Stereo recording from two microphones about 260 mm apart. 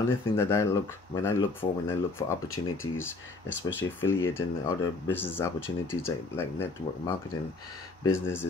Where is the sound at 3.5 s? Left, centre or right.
Left.